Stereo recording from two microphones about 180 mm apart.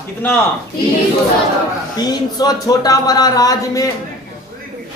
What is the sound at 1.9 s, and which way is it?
Speech, 20° left (ahead or behind).